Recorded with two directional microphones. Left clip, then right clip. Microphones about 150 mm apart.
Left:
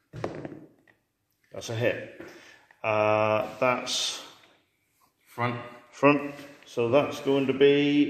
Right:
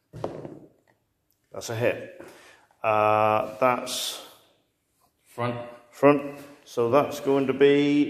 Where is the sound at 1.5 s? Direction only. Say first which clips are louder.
Right 2 dB; centre (ahead or behind).